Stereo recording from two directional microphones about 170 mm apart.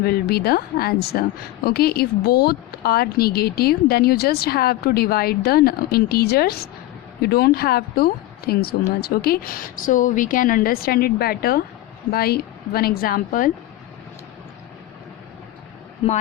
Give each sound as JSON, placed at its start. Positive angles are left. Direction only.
{"t": 0.0, "sound": "a woman's voice", "side_deg": 65}